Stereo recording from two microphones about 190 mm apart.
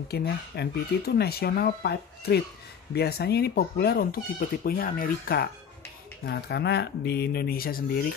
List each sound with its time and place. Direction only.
0.1 s speech: 55° left (ahead or behind)